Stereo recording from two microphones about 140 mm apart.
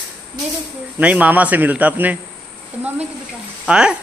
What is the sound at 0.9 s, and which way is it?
A woman's voice, 10° right (ahead or behind).